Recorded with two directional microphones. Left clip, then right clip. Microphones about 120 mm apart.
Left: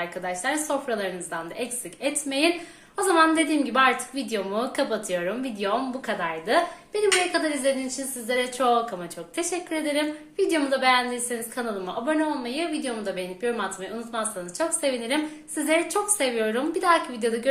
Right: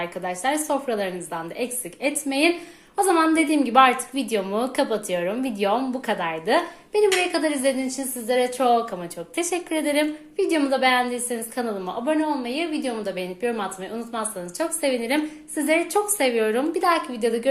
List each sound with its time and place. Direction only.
0.0 s a woman's voice: 45° right (ahead or behind)